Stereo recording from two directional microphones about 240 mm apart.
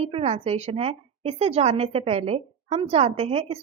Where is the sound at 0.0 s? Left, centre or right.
Right.